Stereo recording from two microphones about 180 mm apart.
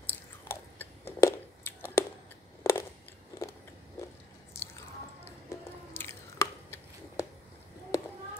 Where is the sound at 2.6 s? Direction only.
15° left (ahead or behind).